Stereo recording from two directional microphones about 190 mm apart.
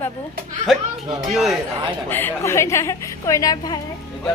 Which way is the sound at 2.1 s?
10° left (ahead or behind).